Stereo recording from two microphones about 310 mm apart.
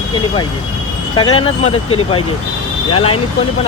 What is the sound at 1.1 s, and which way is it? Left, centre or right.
Speech, centre.